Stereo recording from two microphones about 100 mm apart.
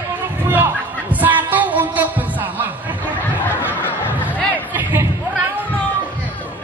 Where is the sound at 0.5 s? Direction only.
20° right (ahead or behind).